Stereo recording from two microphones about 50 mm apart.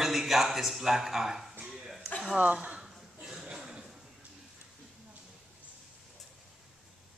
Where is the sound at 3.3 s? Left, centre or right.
Centre.